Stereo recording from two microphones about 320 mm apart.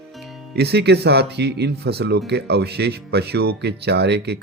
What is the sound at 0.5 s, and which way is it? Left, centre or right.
Speech, right.